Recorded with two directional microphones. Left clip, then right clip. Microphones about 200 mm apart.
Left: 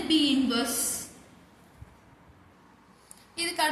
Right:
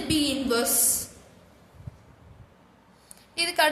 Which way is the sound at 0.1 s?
55° right (ahead or behind).